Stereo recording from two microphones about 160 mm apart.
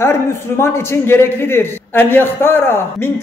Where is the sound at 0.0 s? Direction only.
15° left (ahead or behind).